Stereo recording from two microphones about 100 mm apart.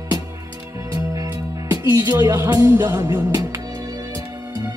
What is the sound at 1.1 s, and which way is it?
Music, 35° right (ahead or behind).